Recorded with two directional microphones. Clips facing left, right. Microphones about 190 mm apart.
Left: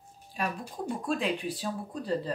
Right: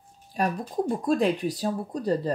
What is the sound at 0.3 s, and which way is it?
Speech, 40° right (ahead or behind).